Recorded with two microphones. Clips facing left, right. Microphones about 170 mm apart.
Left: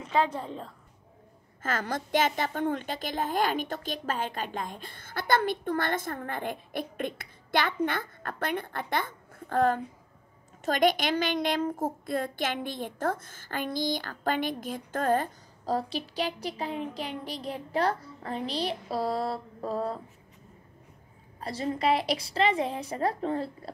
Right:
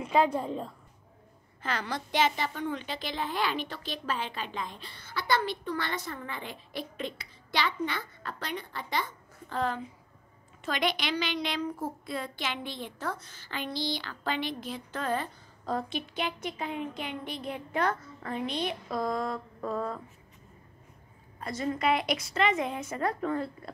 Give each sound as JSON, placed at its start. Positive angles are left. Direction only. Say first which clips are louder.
{"t": 0.0, "sound": "a woman's voice", "louder": "right 2 dB", "side_deg": -10}
{"t": 1.6, "sound": "a woman's voice", "louder": "left 2 dB", "side_deg": 45}
{"t": 21.4, "sound": "a woman's voice", "louder": "left 1 dB", "side_deg": 30}